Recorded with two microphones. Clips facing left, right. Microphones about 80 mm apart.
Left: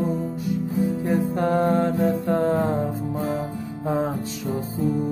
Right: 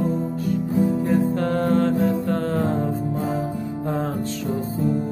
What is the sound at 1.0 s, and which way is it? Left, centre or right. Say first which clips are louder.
Music: right 2 dB; centre.